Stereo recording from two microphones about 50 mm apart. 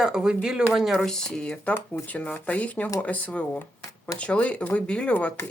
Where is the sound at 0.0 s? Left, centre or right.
Centre.